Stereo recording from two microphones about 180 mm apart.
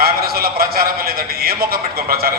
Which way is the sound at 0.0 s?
55° right (ahead or behind).